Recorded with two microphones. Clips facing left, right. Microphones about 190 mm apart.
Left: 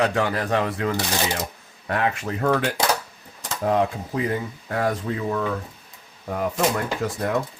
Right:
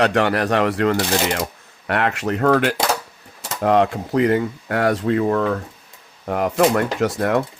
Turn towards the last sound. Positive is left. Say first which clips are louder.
# right 5 dB
turn(degrees=-70)  # may be behind; listen again after turning